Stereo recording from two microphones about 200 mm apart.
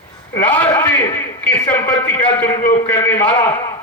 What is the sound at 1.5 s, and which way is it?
A man's voice, 10° left (ahead or behind).